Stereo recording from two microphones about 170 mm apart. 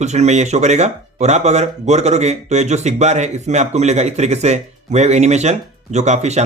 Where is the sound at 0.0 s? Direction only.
40° right (ahead or behind).